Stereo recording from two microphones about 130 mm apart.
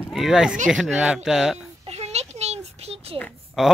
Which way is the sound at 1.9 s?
55° right (ahead or behind).